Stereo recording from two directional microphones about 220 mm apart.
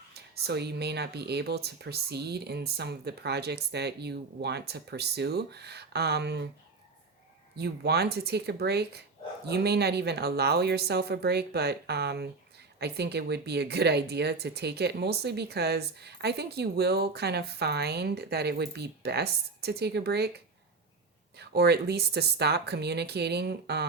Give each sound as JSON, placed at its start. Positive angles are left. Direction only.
{"t": 0.1, "sound": "speech", "side_deg": -45}
{"t": 7.5, "sound": "speech", "side_deg": -45}